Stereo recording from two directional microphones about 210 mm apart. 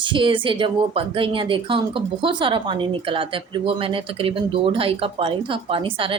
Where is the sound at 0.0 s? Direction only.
25° right (ahead or behind).